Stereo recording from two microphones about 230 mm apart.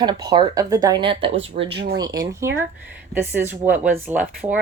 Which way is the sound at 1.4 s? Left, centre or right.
Right.